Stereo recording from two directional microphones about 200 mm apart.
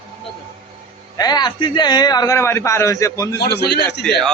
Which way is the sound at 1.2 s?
20° left (ahead or behind).